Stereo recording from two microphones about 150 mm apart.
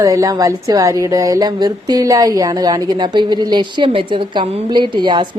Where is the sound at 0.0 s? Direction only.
20° right (ahead or behind).